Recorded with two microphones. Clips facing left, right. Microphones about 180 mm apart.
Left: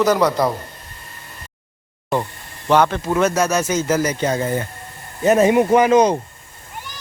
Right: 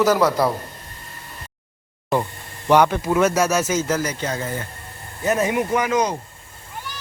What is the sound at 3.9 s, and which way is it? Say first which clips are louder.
Speech: left 5 dB; 15° left (ahead or behind).